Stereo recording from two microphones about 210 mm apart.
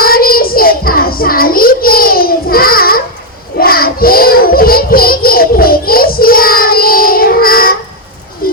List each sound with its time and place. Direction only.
0.0 s child singing: 45° left (ahead or behind)